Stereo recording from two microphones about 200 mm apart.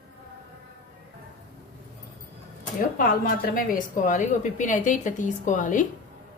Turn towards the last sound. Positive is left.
turn(degrees=40)  # may be behind; listen again after turning